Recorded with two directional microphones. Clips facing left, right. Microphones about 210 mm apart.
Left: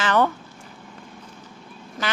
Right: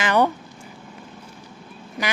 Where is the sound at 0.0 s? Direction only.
15° right (ahead or behind).